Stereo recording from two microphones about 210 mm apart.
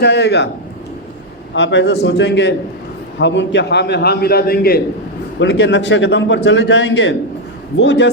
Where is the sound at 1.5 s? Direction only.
55° left (ahead or behind).